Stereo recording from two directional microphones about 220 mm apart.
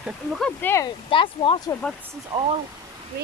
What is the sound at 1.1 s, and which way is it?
Speech, 25° left (ahead or behind).